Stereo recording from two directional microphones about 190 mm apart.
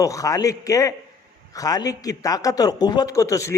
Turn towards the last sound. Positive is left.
turn(degrees=15)  # may be behind; listen again after turning